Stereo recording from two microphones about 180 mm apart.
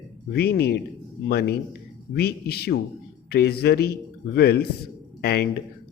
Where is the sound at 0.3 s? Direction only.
65° left (ahead or behind).